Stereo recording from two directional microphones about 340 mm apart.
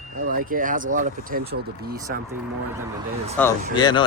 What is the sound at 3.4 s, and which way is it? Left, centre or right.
Speech, centre.